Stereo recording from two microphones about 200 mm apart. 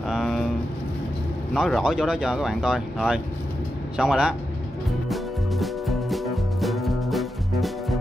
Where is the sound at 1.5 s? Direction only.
Centre (ahead or behind).